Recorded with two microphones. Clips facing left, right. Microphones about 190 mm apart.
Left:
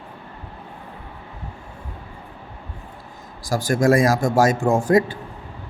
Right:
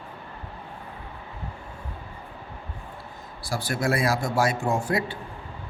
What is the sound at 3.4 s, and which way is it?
Speech, 45° left (ahead or behind).